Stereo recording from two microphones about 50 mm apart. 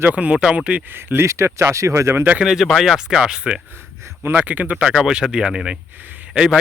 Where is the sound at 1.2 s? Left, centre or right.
Right.